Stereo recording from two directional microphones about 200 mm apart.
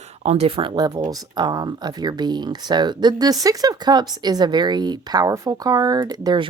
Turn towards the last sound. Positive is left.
turn(degrees=-20)  # may be behind; listen again after turning